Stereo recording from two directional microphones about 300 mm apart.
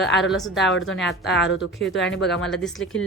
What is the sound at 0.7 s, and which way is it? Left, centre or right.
A woman's voice, left.